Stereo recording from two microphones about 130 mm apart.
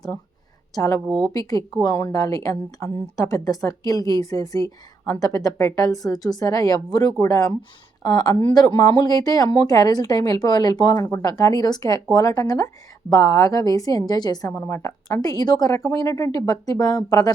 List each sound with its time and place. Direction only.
0.7 s a woman's voice: 25° left (ahead or behind)
1.0 s speech: centre (ahead or behind)
1.3 s a woman's voice: 30° left (ahead or behind)